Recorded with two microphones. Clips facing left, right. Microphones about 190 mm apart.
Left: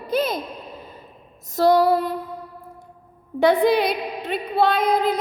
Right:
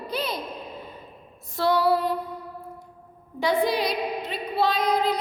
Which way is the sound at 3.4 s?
60° left (ahead or behind).